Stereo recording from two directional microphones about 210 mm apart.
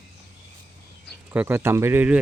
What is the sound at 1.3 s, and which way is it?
Speech, 10° right (ahead or behind).